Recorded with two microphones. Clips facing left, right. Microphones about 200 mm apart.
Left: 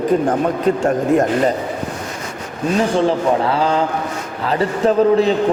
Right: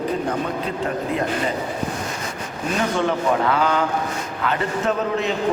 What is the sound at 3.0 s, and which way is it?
A man's voice, 30° left (ahead or behind).